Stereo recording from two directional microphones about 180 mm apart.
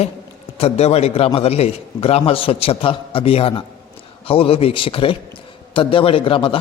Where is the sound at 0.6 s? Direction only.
35° left (ahead or behind).